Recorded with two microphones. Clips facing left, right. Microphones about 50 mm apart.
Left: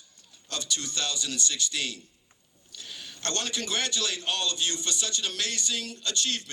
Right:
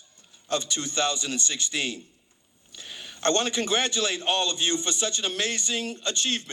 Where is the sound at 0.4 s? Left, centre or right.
Right.